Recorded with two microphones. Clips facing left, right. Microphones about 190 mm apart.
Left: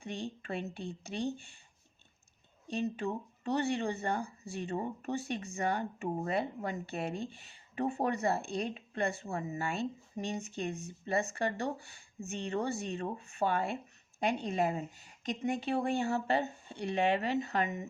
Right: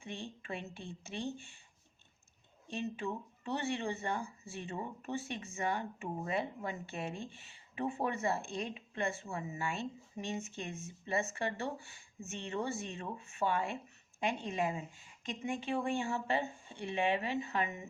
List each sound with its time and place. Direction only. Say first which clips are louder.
0.0 s speech: left 5 dB; 35° left (ahead or behind)
2.7 s speech: left 4 dB; 35° left (ahead or behind)